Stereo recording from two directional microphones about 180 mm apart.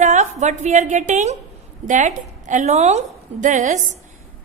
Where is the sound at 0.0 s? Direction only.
40° right (ahead or behind).